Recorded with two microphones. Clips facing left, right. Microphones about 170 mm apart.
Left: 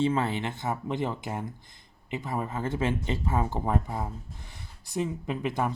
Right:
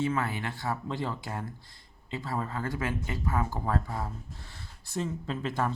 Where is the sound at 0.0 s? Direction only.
25° left (ahead or behind).